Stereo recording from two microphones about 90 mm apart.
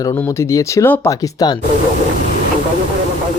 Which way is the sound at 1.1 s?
40° left (ahead or behind).